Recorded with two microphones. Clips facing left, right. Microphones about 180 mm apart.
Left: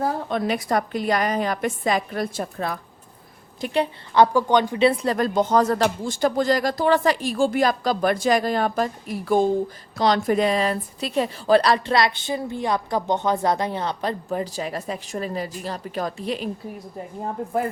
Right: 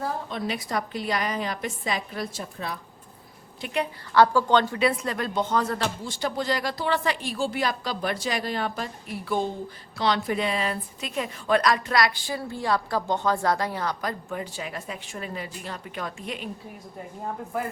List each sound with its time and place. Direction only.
0.3 s speech: 55° left (ahead or behind)
3.6 s a woman's voice: 35° left (ahead or behind)
4.1 s a woman's voice: 20° left (ahead or behind)
4.8 s speech: 30° left (ahead or behind)
5.1 s a woman's voice: 40° left (ahead or behind)